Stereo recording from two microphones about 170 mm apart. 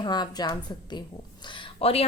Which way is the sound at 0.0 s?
25° left (ahead or behind).